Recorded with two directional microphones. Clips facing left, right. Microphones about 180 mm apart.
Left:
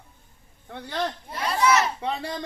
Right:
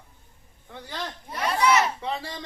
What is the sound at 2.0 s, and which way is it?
Speech, 60° left (ahead or behind).